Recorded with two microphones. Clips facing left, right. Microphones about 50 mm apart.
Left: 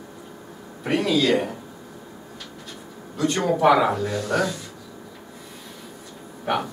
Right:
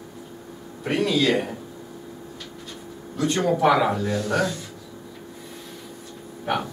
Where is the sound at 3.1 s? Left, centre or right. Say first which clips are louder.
Even; centre.